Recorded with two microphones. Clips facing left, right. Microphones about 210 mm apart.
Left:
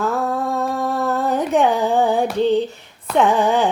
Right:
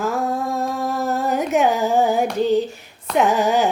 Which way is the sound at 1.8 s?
30° left (ahead or behind).